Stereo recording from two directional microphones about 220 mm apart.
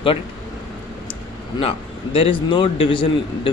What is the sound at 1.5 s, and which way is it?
Speech, 25° left (ahead or behind).